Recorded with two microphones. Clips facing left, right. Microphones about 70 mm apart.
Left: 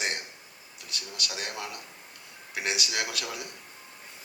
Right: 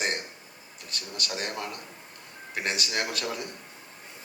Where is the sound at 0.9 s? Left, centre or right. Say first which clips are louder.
Right 2 dB; right.